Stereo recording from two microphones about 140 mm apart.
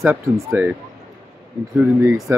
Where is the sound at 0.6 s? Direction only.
15° right (ahead or behind).